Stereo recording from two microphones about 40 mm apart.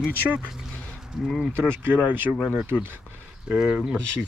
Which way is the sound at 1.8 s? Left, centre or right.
Right.